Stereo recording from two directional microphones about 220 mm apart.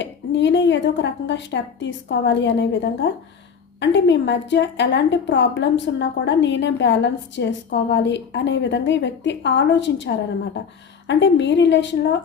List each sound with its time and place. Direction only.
0.0 s a woman's voice: 55° left (ahead or behind)